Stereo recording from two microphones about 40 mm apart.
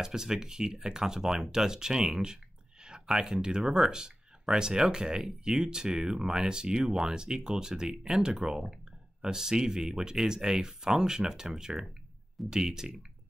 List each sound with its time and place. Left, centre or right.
0.0 s speech: centre